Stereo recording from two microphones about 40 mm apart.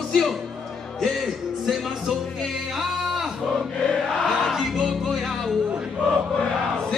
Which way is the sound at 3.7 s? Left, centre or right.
Left.